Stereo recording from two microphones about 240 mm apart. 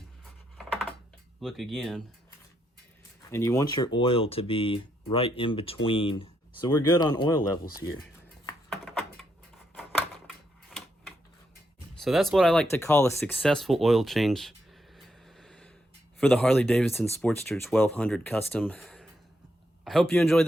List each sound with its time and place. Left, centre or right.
1.4 s speech: centre
3.3 s speech: centre
8.7 s a sound: centre
12.0 s a man's voice: centre